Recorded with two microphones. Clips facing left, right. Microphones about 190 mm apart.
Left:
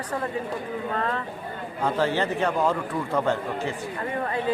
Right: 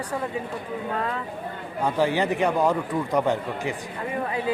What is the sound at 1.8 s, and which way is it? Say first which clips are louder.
Speech: right 1 dB; 15° right (ahead or behind).